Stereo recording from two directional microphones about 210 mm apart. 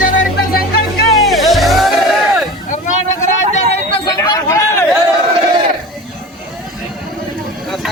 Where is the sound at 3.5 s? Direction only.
25° left (ahead or behind).